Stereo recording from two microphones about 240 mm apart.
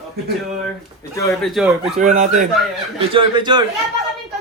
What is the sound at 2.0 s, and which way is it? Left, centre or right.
Speech, right.